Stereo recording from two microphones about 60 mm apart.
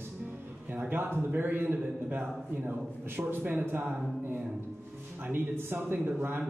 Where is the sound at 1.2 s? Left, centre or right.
Right.